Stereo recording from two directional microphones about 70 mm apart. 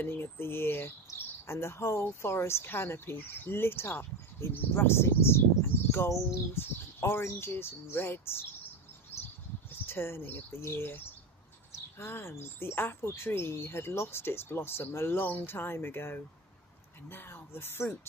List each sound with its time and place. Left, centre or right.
0.0 s speech: left
9.7 s speech: left